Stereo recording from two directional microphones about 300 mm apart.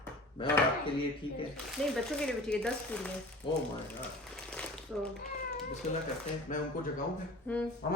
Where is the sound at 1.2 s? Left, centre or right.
Centre.